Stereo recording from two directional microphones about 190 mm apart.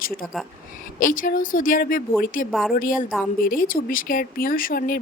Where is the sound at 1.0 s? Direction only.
45° left (ahead or behind).